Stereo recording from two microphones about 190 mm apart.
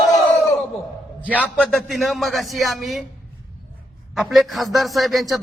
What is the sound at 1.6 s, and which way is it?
A man's voice, centre (ahead or behind).